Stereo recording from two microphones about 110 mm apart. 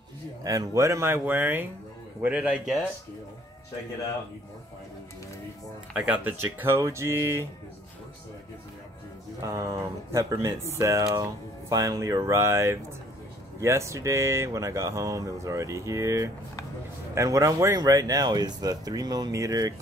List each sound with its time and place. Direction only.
0.4 s speech: 30° right (ahead or behind); by 2.8 s 5° right (ahead or behind)
5.9 s speech: 15° right (ahead or behind)
9.4 s speech: 30° right (ahead or behind)